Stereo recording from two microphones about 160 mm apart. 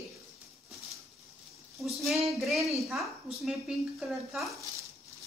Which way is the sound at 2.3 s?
Centre (ahead or behind).